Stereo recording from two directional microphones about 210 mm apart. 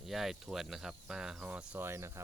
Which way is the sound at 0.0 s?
Centre (ahead or behind).